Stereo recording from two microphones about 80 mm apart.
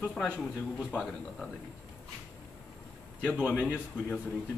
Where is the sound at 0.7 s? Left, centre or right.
Centre.